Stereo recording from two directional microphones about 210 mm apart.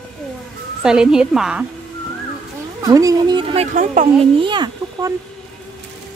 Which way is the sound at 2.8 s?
15° right (ahead or behind).